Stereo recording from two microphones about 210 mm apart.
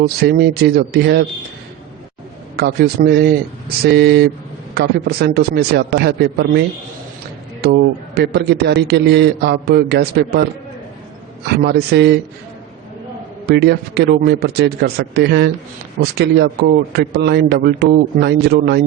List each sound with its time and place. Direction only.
0.0 s a man's voice: 50° right (ahead or behind)
2.6 s a man's voice: 50° right (ahead or behind)
7.6 s a man's voice: 50° right (ahead or behind)
11.4 s a man's voice: 50° right (ahead or behind)
13.5 s a man's voice: 50° right (ahead or behind)